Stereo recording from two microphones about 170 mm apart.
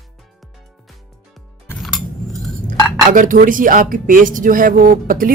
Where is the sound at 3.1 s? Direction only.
50° right (ahead or behind).